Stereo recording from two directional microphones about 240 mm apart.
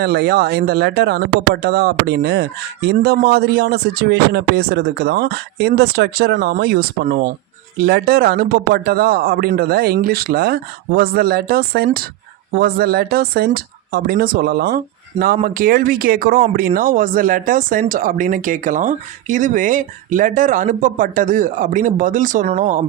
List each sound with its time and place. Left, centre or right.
0.0 s speech: right